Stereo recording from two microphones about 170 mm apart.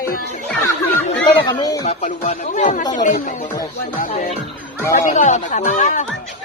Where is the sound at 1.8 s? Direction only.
40° left (ahead or behind).